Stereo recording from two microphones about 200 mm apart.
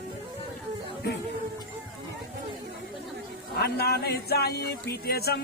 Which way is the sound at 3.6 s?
50° left (ahead or behind).